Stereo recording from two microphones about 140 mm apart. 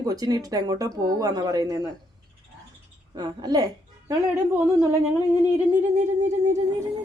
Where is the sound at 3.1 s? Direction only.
30° right (ahead or behind).